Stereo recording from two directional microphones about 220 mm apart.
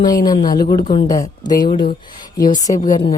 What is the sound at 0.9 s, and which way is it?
Speech, 20° left (ahead or behind).